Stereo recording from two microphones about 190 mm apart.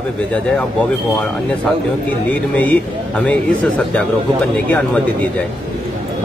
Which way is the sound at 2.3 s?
10° left (ahead or behind).